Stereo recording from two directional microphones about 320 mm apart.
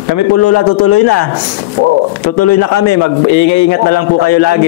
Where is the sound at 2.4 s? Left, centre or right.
Left.